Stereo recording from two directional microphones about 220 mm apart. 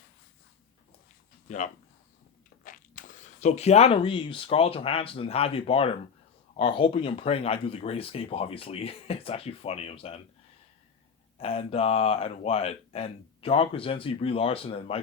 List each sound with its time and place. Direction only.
1.5 s speech: 35° left (ahead or behind)
11.3 s speech: 25° left (ahead or behind)